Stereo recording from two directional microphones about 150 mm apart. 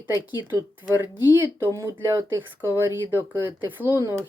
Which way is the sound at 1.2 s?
30° left (ahead or behind).